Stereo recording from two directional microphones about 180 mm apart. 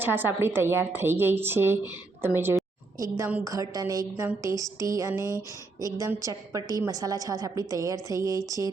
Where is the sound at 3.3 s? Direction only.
10° right (ahead or behind).